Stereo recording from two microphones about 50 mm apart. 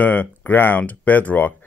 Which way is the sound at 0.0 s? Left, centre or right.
Left.